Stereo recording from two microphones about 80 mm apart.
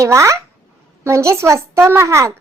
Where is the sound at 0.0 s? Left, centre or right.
Right.